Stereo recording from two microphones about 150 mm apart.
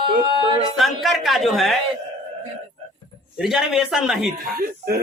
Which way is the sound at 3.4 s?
5° right (ahead or behind).